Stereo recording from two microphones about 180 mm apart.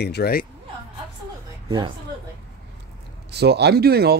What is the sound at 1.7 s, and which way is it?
Speech, 25° right (ahead or behind).